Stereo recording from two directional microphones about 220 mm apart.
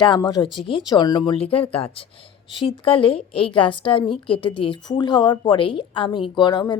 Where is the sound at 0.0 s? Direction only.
20° left (ahead or behind).